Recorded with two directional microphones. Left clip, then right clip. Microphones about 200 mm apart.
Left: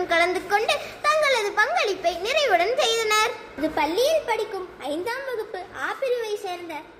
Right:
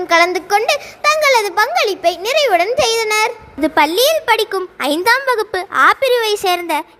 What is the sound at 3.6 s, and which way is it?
A woman's voice, 55° right (ahead or behind).